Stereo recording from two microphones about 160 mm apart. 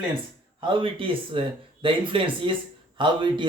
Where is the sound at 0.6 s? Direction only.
30° right (ahead or behind).